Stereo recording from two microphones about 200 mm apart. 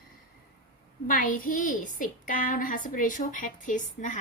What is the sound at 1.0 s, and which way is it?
A woman's voice, 40° left (ahead or behind).